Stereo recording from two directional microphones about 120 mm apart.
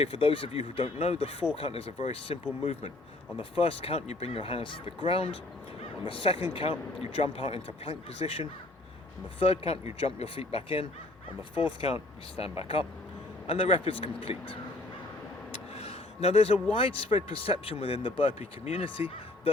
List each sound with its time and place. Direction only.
0.0 s speech: 55° left (ahead or behind)
15.7 s a sound: 60° left (ahead or behind)
16.7 s speech: 50° left (ahead or behind)